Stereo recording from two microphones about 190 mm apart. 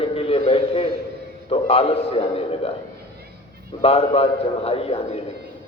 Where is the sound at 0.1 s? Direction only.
30° left (ahead or behind).